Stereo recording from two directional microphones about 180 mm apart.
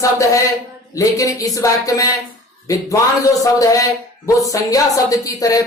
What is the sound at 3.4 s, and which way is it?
Speech, 20° left (ahead or behind).